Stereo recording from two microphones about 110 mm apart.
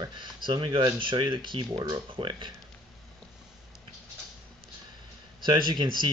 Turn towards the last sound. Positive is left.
turn(degrees=-45)  # may be behind; listen again after turning